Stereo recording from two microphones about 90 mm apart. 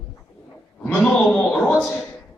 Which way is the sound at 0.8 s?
15° left (ahead or behind).